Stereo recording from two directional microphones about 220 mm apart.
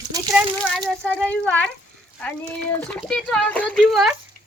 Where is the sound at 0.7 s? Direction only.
5° left (ahead or behind).